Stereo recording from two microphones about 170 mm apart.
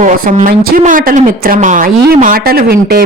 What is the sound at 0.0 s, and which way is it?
A woman's voice, 50° right (ahead or behind).